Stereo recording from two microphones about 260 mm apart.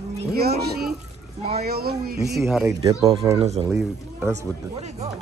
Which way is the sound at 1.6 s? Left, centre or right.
Right.